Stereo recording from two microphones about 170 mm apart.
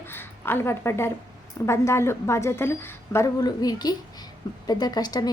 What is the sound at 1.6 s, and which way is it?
A woman's voice, 15° left (ahead or behind).